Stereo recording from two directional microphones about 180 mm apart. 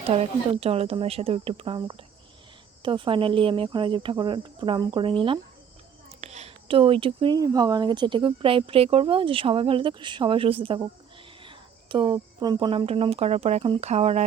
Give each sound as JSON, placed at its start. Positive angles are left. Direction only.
{"t": 0.1, "sound": "speech", "side_deg": -35}